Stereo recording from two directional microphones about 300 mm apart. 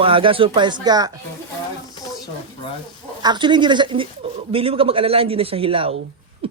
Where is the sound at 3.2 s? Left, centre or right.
Centre.